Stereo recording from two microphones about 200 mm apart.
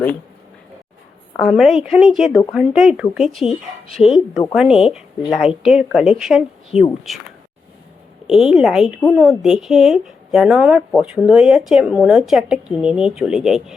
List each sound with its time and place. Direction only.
1.4 s a woman's voice: centre (ahead or behind)
8.3 s a woman's voice: centre (ahead or behind)